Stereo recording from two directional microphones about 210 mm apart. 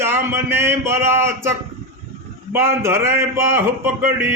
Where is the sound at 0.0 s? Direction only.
10° right (ahead or behind).